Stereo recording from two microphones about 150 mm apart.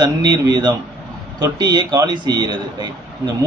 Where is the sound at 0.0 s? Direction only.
30° right (ahead or behind).